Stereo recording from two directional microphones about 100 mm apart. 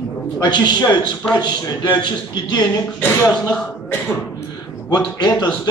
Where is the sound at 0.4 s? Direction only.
45° left (ahead or behind).